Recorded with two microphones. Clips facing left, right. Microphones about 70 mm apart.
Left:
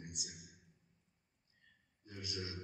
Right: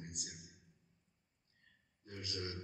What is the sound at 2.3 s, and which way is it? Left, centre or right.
Speech, right.